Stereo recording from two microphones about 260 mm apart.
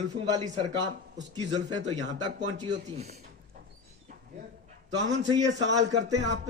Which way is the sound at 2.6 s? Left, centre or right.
Right.